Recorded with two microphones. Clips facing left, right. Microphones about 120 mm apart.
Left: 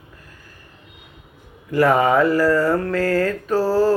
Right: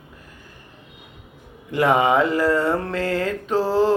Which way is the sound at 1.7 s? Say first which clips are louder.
Left 2 dB; 20° right (ahead or behind).